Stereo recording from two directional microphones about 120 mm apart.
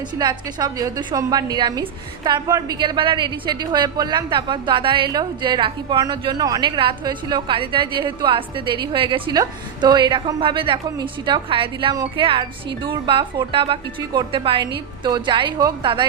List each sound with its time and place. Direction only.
0.2 s a woman's voice: 35° right (ahead or behind)